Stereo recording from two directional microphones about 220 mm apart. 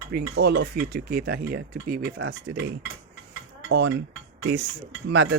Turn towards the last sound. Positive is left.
turn(degrees=-50)  # may be behind; listen again after turning